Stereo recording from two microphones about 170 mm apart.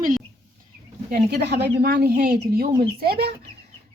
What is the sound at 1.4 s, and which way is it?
A woman's voice, 75° right (ahead or behind).